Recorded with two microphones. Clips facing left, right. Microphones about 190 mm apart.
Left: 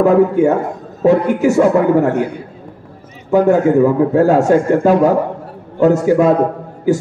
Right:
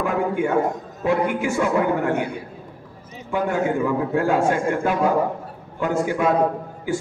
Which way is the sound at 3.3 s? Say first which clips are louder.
Left 11 dB; 40° left (ahead or behind).